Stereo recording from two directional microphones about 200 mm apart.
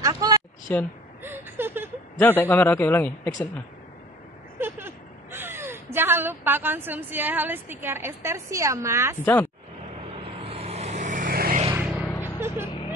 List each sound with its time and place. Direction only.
0.0 s a sound: 20° right (ahead or behind)
0.7 s a man's voice: 10° left (ahead or behind)
1.2 s a sound: 10° right (ahead or behind)
2.1 s a man's voice: 10° left (ahead or behind)
4.6 s a woman's voice: 10° right (ahead or behind)
9.2 s a man's voice: 10° left (ahead or behind)
10.1 s vehicle: 30° right (ahead or behind); by 11.6 s 45° right (ahead or behind)
11.7 s music: 10° right (ahead or behind)